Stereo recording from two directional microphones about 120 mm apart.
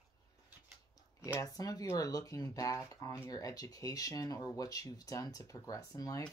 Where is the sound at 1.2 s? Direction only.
25° left (ahead or behind).